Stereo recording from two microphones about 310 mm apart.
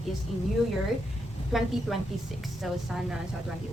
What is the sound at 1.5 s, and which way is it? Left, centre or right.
A woman's voice, centre.